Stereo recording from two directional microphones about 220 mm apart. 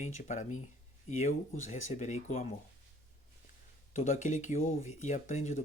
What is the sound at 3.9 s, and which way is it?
Speech, 35° left (ahead or behind).